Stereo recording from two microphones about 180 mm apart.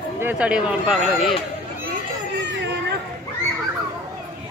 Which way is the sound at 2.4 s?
75° right (ahead or behind).